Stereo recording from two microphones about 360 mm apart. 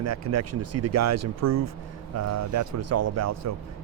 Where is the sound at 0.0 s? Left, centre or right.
Right.